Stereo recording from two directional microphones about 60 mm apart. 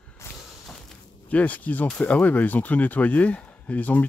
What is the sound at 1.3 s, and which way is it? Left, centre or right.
Speech, left.